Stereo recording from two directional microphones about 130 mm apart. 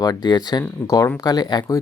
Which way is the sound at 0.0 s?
30° left (ahead or behind).